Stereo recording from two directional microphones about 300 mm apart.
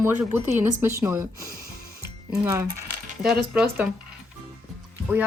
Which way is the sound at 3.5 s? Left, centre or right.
Centre.